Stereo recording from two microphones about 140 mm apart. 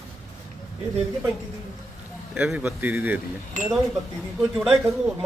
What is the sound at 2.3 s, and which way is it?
Speech, 10° right (ahead or behind).